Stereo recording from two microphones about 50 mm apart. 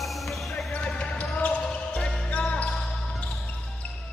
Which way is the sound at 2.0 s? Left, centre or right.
Left.